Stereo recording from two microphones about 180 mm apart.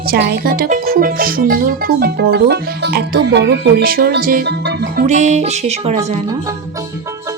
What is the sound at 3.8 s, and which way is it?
Music, 55° right (ahead or behind).